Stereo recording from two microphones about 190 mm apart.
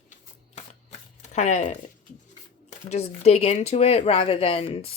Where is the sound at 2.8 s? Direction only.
35° left (ahead or behind).